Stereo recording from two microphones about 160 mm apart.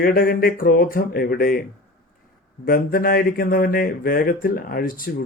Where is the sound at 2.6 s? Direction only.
65° left (ahead or behind).